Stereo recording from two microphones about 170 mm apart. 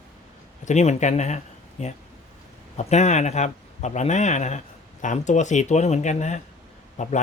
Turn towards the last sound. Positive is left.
turn(degrees=45)  # may be behind; listen again after turning